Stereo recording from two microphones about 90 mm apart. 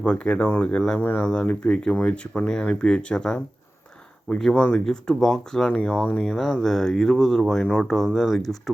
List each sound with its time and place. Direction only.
0.0 s speech: 10° left (ahead or behind)
0.4 s speech: 25° left (ahead or behind)
0.7 s speech: 10° left (ahead or behind)